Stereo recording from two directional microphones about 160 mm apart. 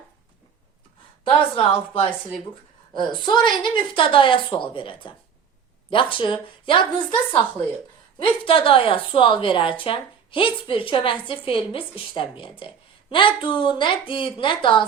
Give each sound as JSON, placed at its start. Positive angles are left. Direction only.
{"t": 1.3, "sound": "a woman's voice", "side_deg": 35}
{"t": 8.2, "sound": "a woman's voice", "side_deg": 35}